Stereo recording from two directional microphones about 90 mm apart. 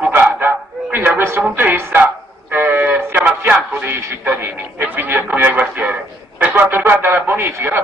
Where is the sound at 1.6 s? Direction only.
20° right (ahead or behind).